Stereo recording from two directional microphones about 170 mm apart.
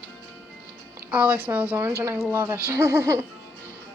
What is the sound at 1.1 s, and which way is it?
Speech, 10° right (ahead or behind).